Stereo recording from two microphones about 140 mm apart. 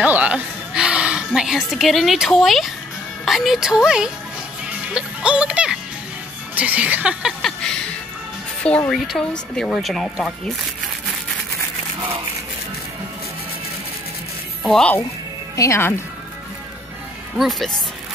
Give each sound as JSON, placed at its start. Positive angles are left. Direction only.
{"t": 0.0, "sound": "a sound", "side_deg": -10}
{"t": 3.3, "sound": "speech", "side_deg": 0}
{"t": 14.6, "sound": "speech", "side_deg": 5}
{"t": 15.5, "sound": "speech", "side_deg": 20}
{"t": 17.4, "sound": "speech", "side_deg": 0}